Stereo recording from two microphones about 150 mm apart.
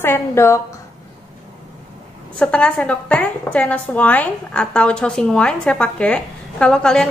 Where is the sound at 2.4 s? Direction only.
5° left (ahead or behind).